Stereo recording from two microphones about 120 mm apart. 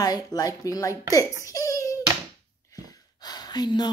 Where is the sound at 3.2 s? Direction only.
35° left (ahead or behind).